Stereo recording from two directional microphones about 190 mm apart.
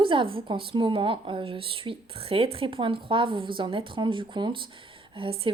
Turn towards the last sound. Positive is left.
turn(degrees=-30)  # may be behind; listen again after turning